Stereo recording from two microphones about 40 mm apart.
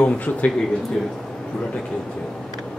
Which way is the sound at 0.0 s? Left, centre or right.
Left.